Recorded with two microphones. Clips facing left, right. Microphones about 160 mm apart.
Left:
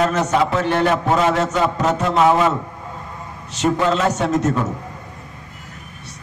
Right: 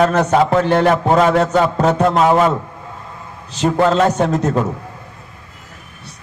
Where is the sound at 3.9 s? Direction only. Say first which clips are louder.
Right 4 dB; 30° right (ahead or behind).